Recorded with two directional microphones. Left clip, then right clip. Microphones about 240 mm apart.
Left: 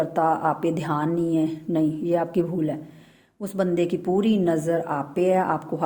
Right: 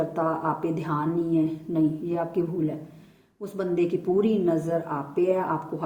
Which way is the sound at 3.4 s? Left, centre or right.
Left.